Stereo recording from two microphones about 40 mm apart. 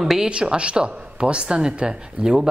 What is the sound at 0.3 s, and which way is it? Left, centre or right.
Speech, right.